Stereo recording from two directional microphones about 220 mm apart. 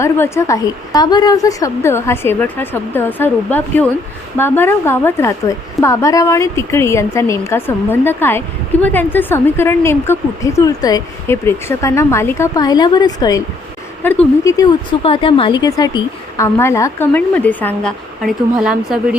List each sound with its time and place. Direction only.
0.0 s a woman's voice: 10° left (ahead or behind); by 19.1 s 5° right (ahead or behind)